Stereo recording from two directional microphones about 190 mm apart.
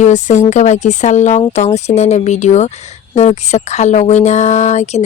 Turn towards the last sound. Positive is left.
turn(degrees=35)  # may be behind; listen again after turning